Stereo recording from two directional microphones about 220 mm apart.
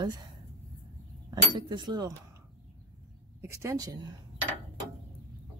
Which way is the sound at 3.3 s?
10° right (ahead or behind).